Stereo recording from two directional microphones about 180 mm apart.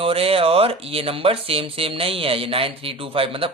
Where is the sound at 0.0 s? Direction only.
30° right (ahead or behind).